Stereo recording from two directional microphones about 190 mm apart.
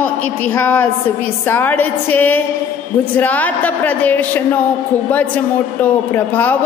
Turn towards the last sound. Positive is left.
turn(degrees=10)  # may be behind; listen again after turning